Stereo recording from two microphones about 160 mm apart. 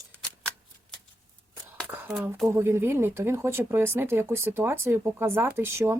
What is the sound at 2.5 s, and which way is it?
Speech, 15° right (ahead or behind).